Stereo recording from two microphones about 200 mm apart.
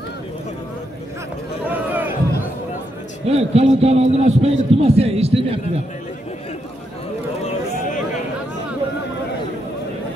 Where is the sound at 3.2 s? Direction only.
30° right (ahead or behind).